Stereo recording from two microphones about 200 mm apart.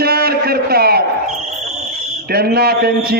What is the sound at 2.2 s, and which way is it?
Speech, 50° right (ahead or behind).